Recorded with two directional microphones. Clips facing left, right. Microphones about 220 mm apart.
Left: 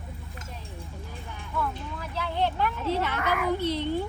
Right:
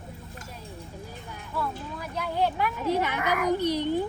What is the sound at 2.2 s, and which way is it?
Speech, 10° right (ahead or behind).